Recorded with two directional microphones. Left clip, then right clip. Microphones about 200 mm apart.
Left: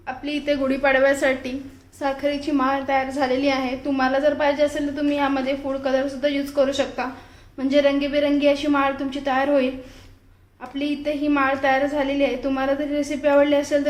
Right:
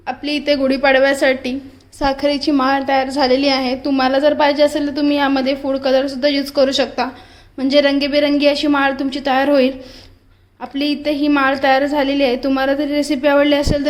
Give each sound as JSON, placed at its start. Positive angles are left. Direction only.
{"t": 0.0, "sound": "a woman's voice", "side_deg": -45}